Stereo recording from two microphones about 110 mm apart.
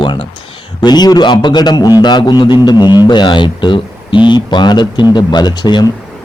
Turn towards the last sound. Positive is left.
turn(degrees=40)  # may be behind; listen again after turning